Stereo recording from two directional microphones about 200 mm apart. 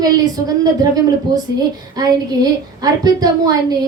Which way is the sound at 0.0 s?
20° right (ahead or behind).